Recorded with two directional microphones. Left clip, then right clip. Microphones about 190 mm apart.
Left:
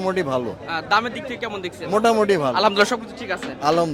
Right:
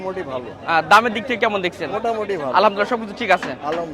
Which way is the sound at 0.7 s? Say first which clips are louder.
Right 7 dB; 20° right (ahead or behind).